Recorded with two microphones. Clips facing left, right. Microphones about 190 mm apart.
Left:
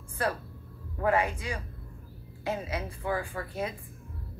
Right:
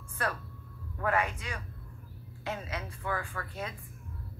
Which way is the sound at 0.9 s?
30° left (ahead or behind).